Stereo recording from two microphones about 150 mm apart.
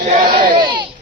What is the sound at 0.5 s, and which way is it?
Speech, 30° right (ahead or behind).